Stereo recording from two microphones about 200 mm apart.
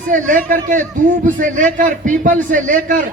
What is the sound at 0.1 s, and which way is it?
A man's voice, 40° right (ahead or behind).